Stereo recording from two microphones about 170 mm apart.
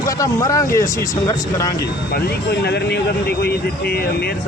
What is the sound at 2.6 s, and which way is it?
Speech, 75° left (ahead or behind).